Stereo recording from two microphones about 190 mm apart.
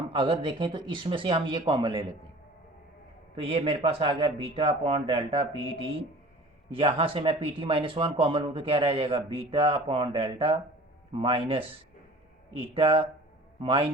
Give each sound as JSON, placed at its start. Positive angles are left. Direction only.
{"t": 0.1, "sound": "speech", "side_deg": -25}
{"t": 3.3, "sound": "speech", "side_deg": -30}